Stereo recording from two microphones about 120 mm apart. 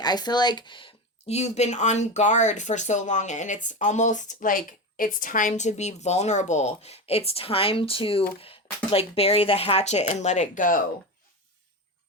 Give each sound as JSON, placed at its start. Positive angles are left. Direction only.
{"t": 0.0, "sound": "speech", "side_deg": 35}
{"t": 1.3, "sound": "speech", "side_deg": 65}